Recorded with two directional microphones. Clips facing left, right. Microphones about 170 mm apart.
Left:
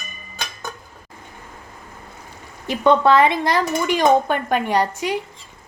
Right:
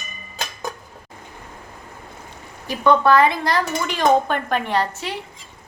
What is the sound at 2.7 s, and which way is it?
Speech, 20° left (ahead or behind).